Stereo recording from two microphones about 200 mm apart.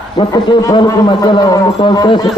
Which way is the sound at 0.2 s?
20° left (ahead or behind).